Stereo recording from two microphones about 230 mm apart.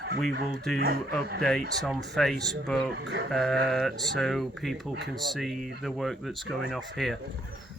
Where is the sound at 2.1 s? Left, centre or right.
Centre.